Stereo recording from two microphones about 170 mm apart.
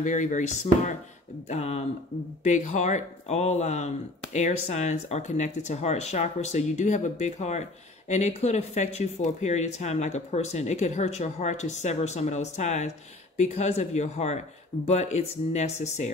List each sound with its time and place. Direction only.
0.0 s speech: 45° left (ahead or behind)